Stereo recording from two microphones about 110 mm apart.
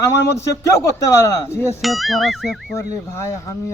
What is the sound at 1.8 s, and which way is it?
Speech, centre (ahead or behind).